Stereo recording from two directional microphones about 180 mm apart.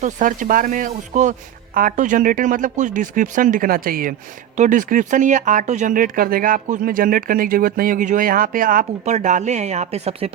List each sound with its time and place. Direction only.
0.0 s speech: 45° right (ahead or behind)